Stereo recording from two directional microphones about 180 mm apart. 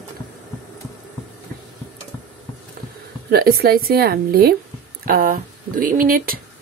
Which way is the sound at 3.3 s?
60° right (ahead or behind).